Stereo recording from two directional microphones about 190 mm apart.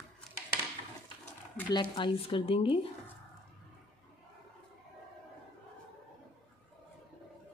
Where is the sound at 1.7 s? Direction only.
25° left (ahead or behind).